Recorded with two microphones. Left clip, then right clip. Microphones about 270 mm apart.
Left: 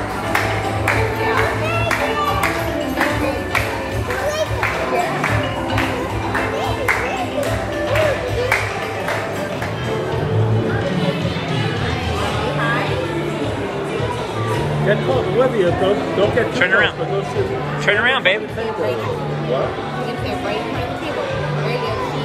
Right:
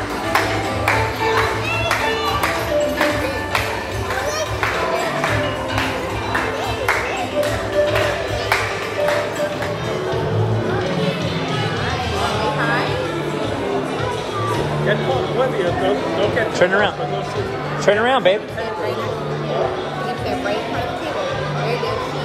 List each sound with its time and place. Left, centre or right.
16.5 s speech: centre